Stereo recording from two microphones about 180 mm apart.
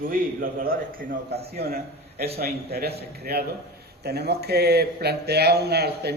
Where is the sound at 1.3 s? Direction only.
60° right (ahead or behind).